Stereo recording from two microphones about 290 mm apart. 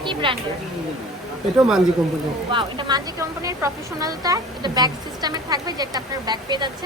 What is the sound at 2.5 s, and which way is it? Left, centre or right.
A woman's voice, centre.